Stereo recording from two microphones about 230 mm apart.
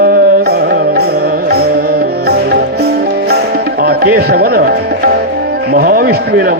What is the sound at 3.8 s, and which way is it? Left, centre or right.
Speech, right.